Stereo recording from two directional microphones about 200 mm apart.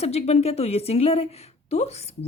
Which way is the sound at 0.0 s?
30° left (ahead or behind).